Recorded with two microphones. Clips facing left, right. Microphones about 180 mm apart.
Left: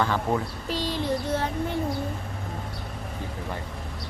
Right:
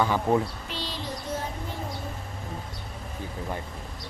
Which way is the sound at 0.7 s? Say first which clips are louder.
Left 8 dB; 50° left (ahead or behind).